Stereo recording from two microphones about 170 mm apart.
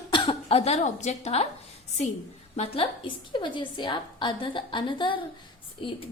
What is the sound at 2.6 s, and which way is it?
A woman's voice, 35° left (ahead or behind).